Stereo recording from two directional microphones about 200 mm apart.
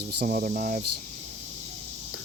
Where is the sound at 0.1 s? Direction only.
50° right (ahead or behind).